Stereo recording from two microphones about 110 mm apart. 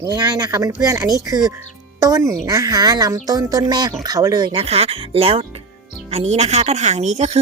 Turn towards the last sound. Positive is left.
turn(degrees=-90)